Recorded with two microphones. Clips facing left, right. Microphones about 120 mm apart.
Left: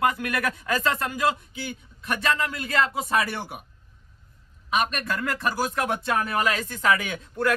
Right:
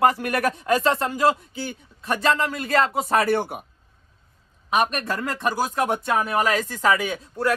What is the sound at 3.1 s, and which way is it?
Speech, 55° right (ahead or behind).